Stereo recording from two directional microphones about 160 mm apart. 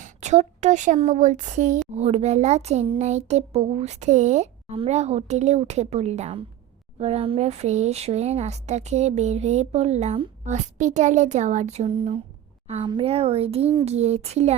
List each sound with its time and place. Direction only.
0.0 s a woman's voice: 45° right (ahead or behind)